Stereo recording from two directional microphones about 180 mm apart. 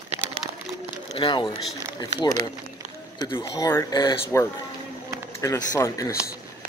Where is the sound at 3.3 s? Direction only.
20° left (ahead or behind).